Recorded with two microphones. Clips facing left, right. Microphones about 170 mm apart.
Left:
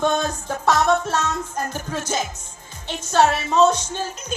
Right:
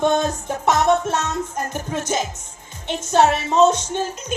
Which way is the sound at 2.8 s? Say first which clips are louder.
Right 2 dB; 20° right (ahead or behind).